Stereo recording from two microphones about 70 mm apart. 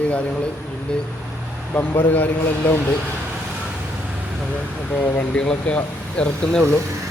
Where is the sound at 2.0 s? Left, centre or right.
Left.